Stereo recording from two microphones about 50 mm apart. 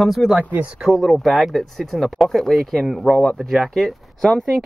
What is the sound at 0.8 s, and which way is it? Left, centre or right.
Speech, centre.